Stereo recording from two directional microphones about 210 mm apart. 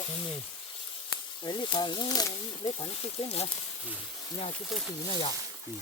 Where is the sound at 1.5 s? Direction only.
20° left (ahead or behind).